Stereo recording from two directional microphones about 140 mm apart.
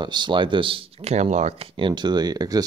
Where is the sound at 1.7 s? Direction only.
35° right (ahead or behind).